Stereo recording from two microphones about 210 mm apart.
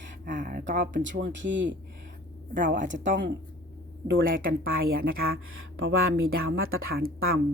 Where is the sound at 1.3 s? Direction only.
60° right (ahead or behind).